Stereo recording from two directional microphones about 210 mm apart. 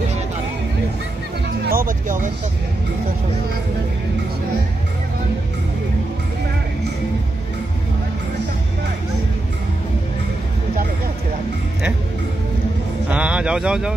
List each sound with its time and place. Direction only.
1.6 s music: 45° right (ahead or behind)
13.1 s speech: 5° right (ahead or behind)